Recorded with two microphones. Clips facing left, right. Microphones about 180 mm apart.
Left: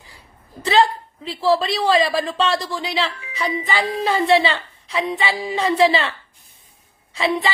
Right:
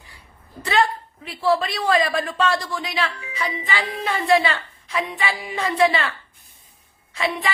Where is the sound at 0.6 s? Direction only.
25° left (ahead or behind).